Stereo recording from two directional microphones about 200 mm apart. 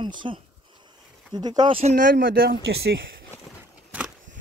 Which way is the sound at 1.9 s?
45° right (ahead or behind).